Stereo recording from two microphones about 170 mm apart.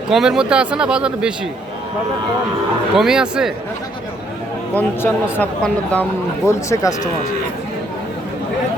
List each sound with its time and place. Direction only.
0.1 s speech: 5° right (ahead or behind)
2.9 s speech: 5° right (ahead or behind)
4.7 s speech: 10° left (ahead or behind)